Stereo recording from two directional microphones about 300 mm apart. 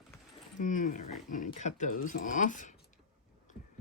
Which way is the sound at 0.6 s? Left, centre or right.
Left.